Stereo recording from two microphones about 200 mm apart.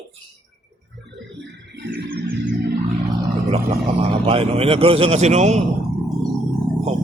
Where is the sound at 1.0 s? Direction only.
60° right (ahead or behind).